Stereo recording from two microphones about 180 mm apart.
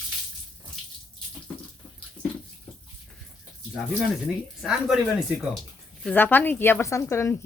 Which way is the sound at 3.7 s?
5° right (ahead or behind).